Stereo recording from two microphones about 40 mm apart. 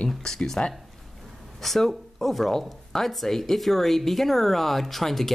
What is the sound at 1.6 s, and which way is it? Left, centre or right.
Speech, centre.